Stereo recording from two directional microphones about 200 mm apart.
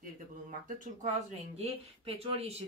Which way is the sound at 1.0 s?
30° right (ahead or behind).